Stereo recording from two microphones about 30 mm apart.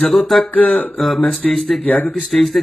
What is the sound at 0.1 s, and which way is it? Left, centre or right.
A man's voice, centre.